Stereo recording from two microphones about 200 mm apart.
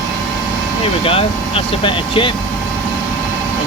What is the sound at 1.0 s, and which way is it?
Speech, 30° left (ahead or behind).